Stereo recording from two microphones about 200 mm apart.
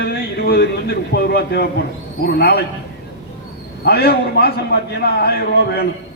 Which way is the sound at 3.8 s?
50° left (ahead or behind).